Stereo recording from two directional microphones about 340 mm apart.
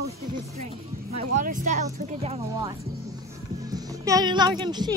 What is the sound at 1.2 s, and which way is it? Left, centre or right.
Speech, right.